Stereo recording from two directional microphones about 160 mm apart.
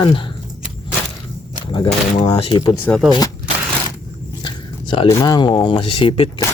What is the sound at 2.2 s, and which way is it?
Speech, 35° left (ahead or behind).